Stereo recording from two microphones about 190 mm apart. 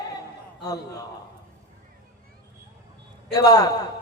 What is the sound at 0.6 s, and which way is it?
Speech, 20° left (ahead or behind).